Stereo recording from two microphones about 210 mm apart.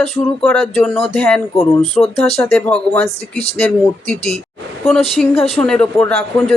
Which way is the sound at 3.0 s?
30° left (ahead or behind).